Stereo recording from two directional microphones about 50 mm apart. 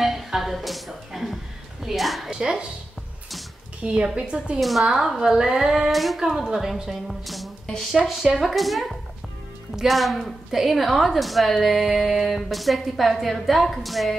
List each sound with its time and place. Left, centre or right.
0.0 s music: centre
1.9 s a sound: centre
2.3 s a woman's voice: centre
3.8 s speech: centre
4.6 s a woman's voice: centre
5.9 s a woman's voice: centre